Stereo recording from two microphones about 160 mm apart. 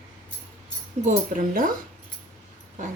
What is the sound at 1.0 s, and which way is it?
Speech, 55° right (ahead or behind).